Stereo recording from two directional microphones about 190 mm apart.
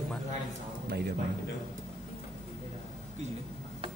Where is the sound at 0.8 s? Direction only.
55° right (ahead or behind).